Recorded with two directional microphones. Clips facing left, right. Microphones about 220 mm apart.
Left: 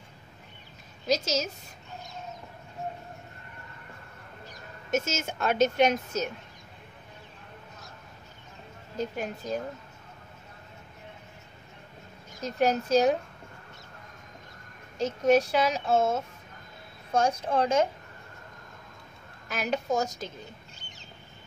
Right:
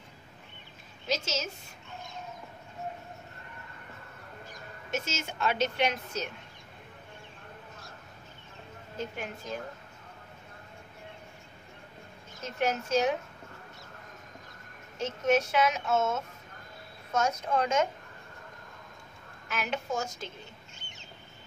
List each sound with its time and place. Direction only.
1.0 s a woman's voice: 40° left (ahead or behind)
4.9 s a woman's voice: 45° left (ahead or behind)
8.9 s speech: 40° left (ahead or behind)
12.4 s speech: 40° left (ahead or behind)
15.0 s speech: 35° left (ahead or behind)
19.5 s speech: 40° left (ahead or behind)